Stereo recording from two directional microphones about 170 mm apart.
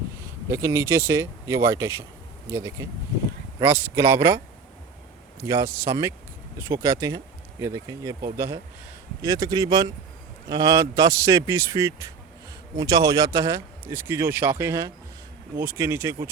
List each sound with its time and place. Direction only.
0.4 s a man's voice: 15° right (ahead or behind)
5.5 s a man's voice: 20° right (ahead or behind)